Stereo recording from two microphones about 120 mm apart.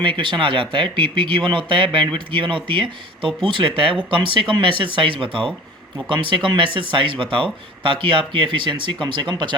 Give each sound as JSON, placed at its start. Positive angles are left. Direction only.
{"t": 0.0, "sound": "speech", "side_deg": -45}